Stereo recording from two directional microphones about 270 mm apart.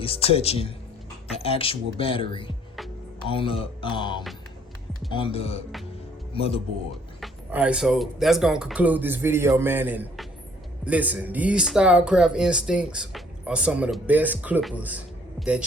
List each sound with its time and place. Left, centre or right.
0.0 s speech: left
7.2 s speech: centre